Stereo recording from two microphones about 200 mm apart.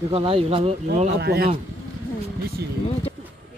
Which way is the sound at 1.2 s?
50° right (ahead or behind).